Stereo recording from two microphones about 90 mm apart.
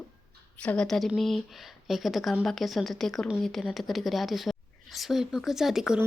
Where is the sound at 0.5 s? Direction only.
15° left (ahead or behind).